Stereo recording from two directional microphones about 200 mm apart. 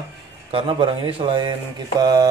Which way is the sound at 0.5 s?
25° right (ahead or behind).